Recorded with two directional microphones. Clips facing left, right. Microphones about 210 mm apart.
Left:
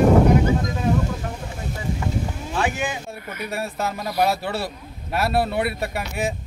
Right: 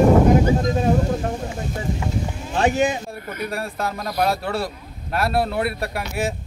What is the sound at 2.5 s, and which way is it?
Speech, 40° right (ahead or behind).